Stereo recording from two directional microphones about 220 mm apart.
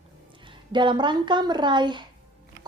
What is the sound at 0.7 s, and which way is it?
A woman's voice, 20° right (ahead or behind).